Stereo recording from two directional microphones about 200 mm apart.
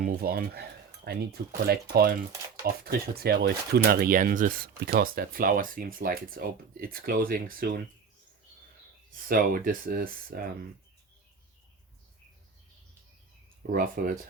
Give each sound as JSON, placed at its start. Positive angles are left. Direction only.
{"t": 0.0, "sound": "speech", "side_deg": -50}
{"t": 9.1, "sound": "speech", "side_deg": -45}
{"t": 13.7, "sound": "speech", "side_deg": -45}